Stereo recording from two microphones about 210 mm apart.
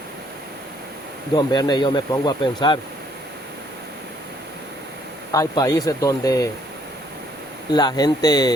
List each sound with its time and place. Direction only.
1.4 s speech: 20° left (ahead or behind)
5.3 s speech: 15° left (ahead or behind)
7.7 s speech: 20° left (ahead or behind)